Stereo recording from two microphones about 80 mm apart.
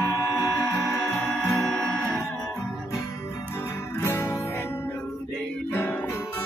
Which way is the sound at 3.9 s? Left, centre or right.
Left.